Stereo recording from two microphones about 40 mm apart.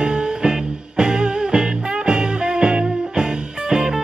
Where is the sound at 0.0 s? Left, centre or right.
Right.